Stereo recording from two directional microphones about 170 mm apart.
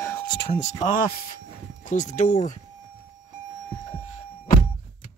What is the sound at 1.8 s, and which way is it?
Speech, 45° left (ahead or behind).